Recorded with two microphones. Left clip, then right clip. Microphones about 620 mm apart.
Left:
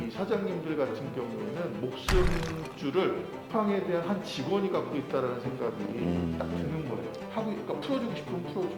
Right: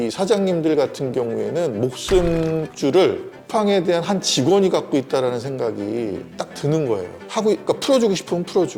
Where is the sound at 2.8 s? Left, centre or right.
Right.